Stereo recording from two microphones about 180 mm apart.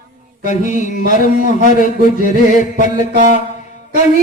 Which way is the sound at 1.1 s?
45° left (ahead or behind).